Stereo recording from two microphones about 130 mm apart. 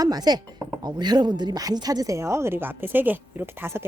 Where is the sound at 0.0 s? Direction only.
30° right (ahead or behind).